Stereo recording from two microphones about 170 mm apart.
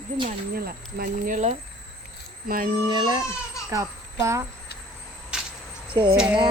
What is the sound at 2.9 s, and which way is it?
Speech, 25° right (ahead or behind).